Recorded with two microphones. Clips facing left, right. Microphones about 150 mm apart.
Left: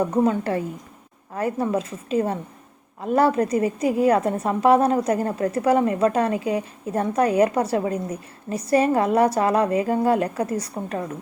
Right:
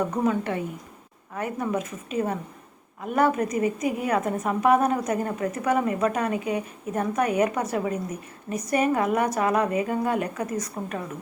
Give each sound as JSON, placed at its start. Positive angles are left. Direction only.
{"t": 0.3, "sound": "a woman's voice", "side_deg": 35}